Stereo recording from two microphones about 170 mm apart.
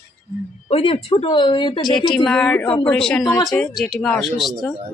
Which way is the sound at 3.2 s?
20° left (ahead or behind).